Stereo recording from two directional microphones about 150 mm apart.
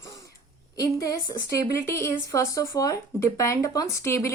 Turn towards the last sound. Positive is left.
turn(degrees=20)  # may be behind; listen again after turning